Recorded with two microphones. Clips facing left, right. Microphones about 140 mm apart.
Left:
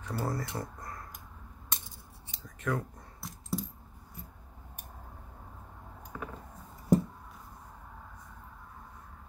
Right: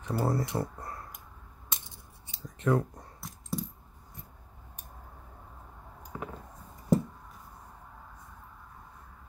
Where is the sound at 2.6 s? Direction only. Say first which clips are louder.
Right 6 dB; 30° right (ahead or behind).